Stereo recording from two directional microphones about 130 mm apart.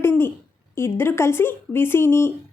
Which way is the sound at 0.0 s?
20° left (ahead or behind).